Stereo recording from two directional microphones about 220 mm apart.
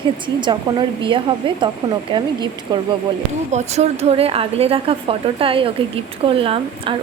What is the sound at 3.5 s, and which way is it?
A woman's voice, 30° right (ahead or behind).